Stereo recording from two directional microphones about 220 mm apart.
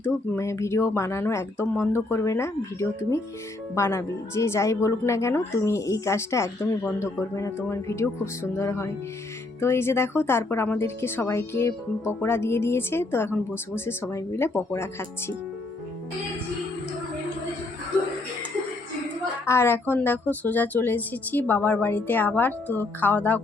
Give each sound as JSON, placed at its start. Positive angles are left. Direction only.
{"t": 0.0, "sound": "speech", "side_deg": 10}
{"t": 19.5, "sound": "speech", "side_deg": 10}